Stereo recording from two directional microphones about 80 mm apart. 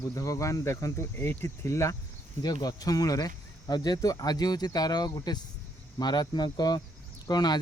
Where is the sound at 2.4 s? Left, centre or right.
Left.